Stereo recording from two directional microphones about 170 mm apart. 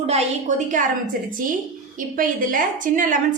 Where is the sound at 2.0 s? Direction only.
55° right (ahead or behind).